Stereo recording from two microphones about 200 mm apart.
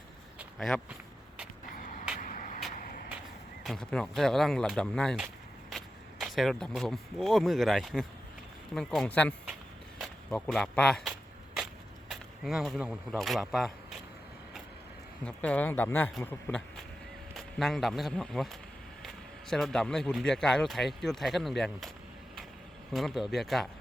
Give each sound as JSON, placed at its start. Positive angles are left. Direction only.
{"t": 0.3, "sound": "a sound", "side_deg": 0}
{"t": 2.2, "sound": "vehicle", "side_deg": 40}
{"t": 3.6, "sound": "speech", "side_deg": 0}
{"t": 10.0, "sound": "a sound", "side_deg": 5}
{"t": 12.1, "sound": "speech", "side_deg": 0}
{"t": 15.2, "sound": "speech", "side_deg": 5}